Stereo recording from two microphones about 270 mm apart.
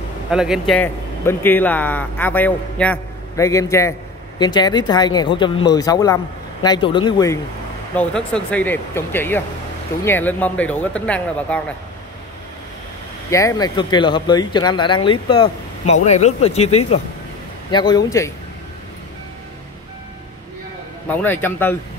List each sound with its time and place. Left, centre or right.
0.3 s speech: centre
13.3 s speech: centre
21.1 s speech: centre